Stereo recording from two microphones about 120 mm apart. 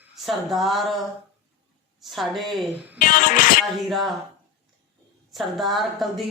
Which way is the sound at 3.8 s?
Centre (ahead or behind).